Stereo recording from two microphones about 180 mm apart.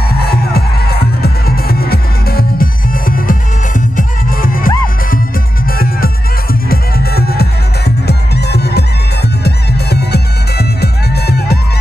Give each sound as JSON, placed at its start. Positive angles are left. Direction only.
{"t": 0.1, "sound": "music", "side_deg": 60}